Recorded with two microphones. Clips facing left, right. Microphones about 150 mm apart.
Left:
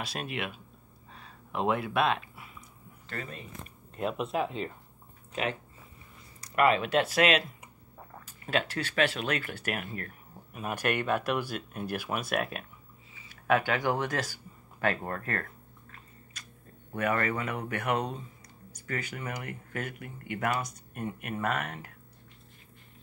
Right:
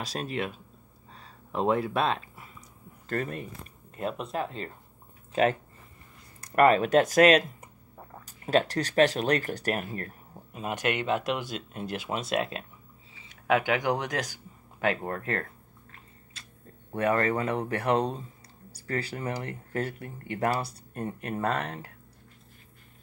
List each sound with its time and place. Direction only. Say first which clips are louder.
0.0 s speech: right 3 dB; 35° right (ahead or behind)
1.1 s a sound: right 3 dB; 35° right (ahead or behind)
3.1 s speech: right 9 dB; 50° right (ahead or behind)
3.9 s speech: left 1 dB; centre (ahead or behind)
5.3 s speech: right 8 dB; 40° right (ahead or behind); by 15.4 s 20° right (ahead or behind)
16.3 s tick-tock: even; 25° right (ahead or behind)
16.9 s speech: right 4 dB; 30° right (ahead or behind)